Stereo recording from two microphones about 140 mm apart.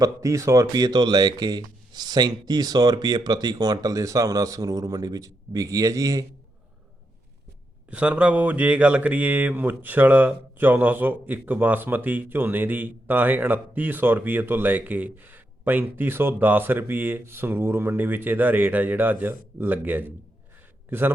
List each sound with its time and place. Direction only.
0.0 s speech: 20° right (ahead or behind)
7.9 s speech: 10° right (ahead or behind)